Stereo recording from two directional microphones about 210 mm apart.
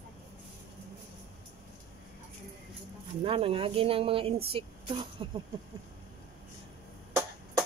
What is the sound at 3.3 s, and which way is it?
Speech, 25° right (ahead or behind).